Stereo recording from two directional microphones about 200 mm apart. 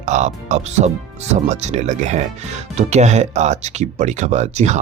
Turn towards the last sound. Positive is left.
turn(degrees=-35)  # may be behind; listen again after turning